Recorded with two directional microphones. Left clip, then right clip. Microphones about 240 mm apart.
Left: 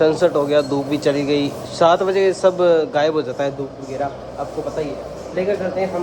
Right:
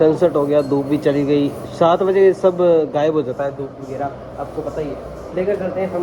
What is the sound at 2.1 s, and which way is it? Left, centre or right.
Speech, centre.